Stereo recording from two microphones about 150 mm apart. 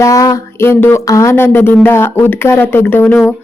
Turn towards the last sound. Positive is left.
turn(degrees=15)  # may be behind; listen again after turning